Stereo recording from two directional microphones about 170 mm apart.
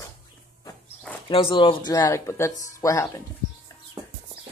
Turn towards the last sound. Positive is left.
turn(degrees=20)  # may be behind; listen again after turning